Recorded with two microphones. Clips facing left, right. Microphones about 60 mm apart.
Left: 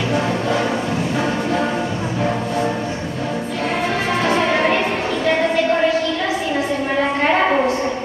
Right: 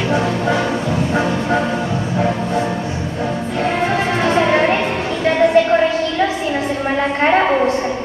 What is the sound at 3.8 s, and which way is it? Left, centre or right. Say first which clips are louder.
Music: right 1 dB; right.